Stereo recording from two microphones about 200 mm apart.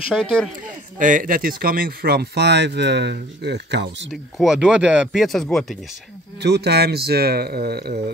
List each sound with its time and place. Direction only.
0.1 s speech: centre (ahead or behind)
0.9 s speech: 40° right (ahead or behind); by 4.1 s 55° right (ahead or behind)
4.1 s speech: centre (ahead or behind)
6.4 s speech: 55° right (ahead or behind)